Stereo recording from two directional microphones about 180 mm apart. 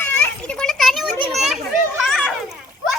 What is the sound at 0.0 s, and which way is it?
Children playing, 10° left (ahead or behind).